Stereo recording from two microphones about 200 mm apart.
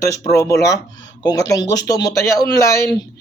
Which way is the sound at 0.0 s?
15° left (ahead or behind).